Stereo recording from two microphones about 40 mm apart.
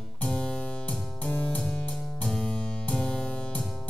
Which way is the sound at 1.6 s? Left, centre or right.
Left.